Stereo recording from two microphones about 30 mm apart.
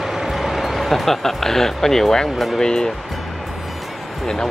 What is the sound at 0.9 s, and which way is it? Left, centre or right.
Speech, centre.